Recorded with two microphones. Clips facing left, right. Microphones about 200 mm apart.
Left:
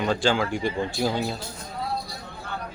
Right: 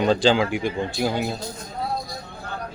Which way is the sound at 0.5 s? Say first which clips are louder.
Right 1 dB; centre (ahead or behind).